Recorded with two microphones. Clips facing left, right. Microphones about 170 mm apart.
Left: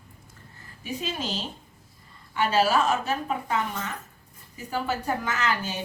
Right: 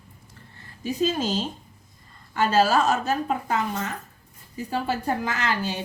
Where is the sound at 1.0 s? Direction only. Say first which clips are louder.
Right 9 dB; 45° right (ahead or behind).